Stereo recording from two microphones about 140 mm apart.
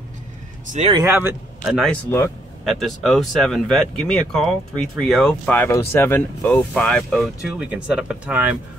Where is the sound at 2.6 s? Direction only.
Centre (ahead or behind).